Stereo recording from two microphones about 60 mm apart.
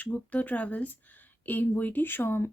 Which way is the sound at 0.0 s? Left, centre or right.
Left.